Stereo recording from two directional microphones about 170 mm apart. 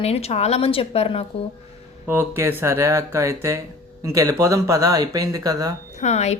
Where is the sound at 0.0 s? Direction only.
35° left (ahead or behind).